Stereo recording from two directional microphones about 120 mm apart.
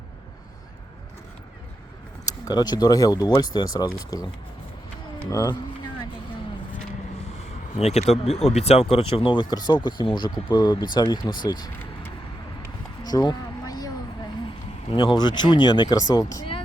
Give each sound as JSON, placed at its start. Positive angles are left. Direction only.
{"t": 2.4, "sound": "speech", "side_deg": 35}
{"t": 5.3, "sound": "speech", "side_deg": 30}
{"t": 7.8, "sound": "speech", "side_deg": 65}
{"t": 13.1, "sound": "a sound", "side_deg": 30}
{"t": 14.9, "sound": "speech", "side_deg": 35}